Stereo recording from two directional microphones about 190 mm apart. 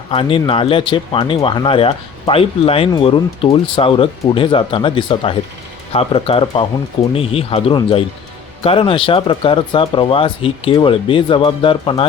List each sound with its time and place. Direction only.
0.1 s speech: 25° left (ahead or behind)